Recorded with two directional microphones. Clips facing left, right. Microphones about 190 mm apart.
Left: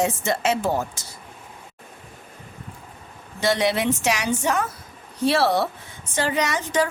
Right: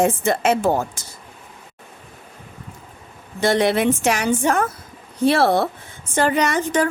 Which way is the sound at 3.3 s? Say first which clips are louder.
Right 4 dB; 50° right (ahead or behind).